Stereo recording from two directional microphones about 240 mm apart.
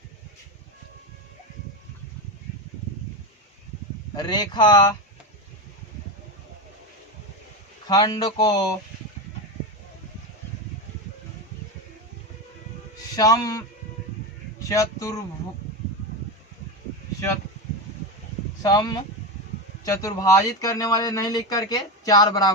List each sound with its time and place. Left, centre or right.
4.1 s speech: centre
7.9 s speech: centre
13.1 s speech: centre
14.6 s speech: centre
18.6 s speech: centre